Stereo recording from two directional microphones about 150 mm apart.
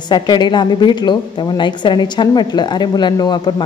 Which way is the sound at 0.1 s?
30° left (ahead or behind).